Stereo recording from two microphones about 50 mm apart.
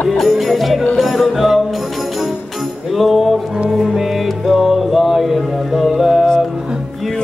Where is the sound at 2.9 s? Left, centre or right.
Centre.